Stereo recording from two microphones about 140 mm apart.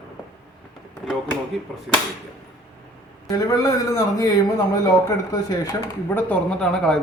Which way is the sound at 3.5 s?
25° left (ahead or behind).